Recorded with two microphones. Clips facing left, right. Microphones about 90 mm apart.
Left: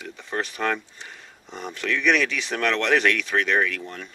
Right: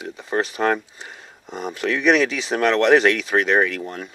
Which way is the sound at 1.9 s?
40° right (ahead or behind).